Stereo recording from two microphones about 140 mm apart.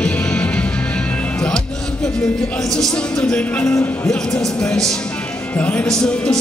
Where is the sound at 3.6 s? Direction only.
20° left (ahead or behind).